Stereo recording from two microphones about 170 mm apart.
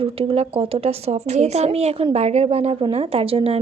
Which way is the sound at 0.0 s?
35° right (ahead or behind).